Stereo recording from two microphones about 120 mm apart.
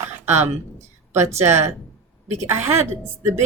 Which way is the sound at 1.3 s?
20° right (ahead or behind).